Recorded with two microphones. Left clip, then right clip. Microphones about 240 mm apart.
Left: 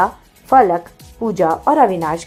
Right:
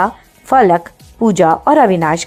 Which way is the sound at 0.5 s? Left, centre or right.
Right.